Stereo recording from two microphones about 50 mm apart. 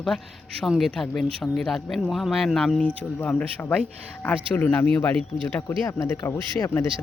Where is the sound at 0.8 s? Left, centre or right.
Centre.